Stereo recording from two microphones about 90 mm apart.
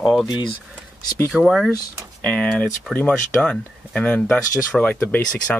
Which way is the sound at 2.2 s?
15° left (ahead or behind).